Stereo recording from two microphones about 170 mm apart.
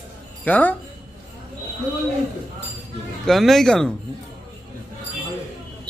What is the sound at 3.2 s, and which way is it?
Speech, centre (ahead or behind).